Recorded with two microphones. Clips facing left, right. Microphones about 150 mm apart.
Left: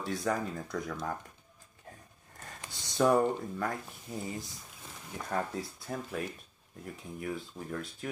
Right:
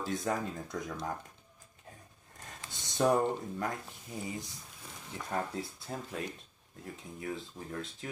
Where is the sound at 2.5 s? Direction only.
20° right (ahead or behind).